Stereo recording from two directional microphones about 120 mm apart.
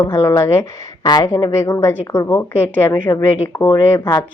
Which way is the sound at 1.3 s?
25° left (ahead or behind).